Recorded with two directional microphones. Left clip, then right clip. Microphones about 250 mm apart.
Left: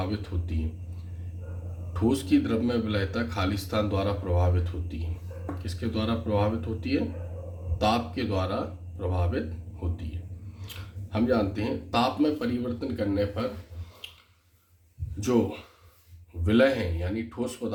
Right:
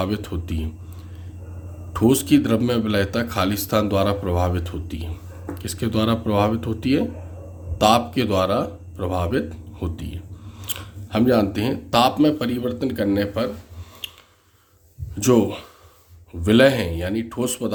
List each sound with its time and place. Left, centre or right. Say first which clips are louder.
0.0 s a man's voice: right 8 dB; right
1.9 s a man's voice: right 7 dB; right
10.6 s a man's voice: right 11 dB; right
15.2 s a man's voice: right 8 dB; right